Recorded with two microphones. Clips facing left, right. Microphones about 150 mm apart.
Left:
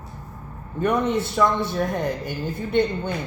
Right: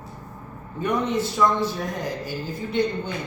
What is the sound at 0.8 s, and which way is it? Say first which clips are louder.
A man's voice: left 2 dB; 60° left (ahead or behind).